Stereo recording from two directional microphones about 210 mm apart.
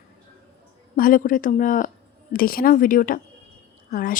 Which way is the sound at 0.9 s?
40° left (ahead or behind).